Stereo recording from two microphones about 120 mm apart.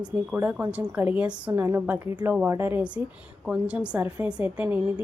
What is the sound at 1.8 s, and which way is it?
Speech, 15° right (ahead or behind).